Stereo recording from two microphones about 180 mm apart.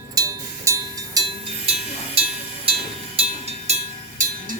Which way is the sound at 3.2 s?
35° right (ahead or behind).